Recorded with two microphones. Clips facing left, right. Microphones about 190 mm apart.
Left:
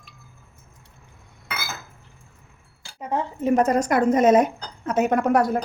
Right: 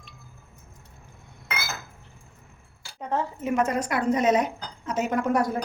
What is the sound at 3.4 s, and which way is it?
Speech, 35° left (ahead or behind).